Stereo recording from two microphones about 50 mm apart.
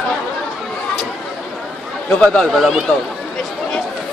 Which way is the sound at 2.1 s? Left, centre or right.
Centre.